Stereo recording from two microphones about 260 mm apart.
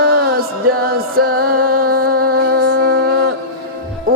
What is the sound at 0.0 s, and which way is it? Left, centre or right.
Music, right.